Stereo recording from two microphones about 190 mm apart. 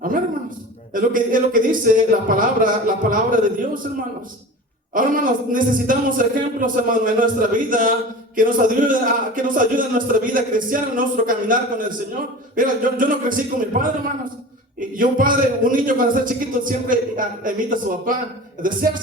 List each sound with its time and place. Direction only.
0.9 s a man's voice: 45° right (ahead or behind)
4.9 s a man's voice: 45° right (ahead or behind)